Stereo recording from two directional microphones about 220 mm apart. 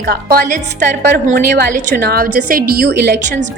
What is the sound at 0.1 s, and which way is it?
A woman's voice, 40° right (ahead or behind).